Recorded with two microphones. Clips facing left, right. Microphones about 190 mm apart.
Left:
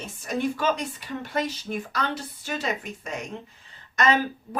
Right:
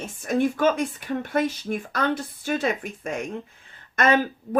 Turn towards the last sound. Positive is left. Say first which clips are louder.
# right 2 dB
turn(degrees=-55)  # may be behind; listen again after turning